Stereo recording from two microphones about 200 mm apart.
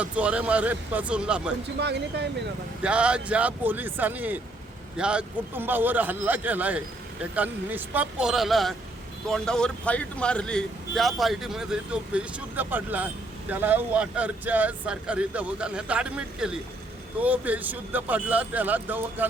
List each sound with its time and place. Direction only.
0.0 s a man's voice: 5° right (ahead or behind)
1.8 s speech: 60° right (ahead or behind)
2.8 s a man's voice: 5° right (ahead or behind)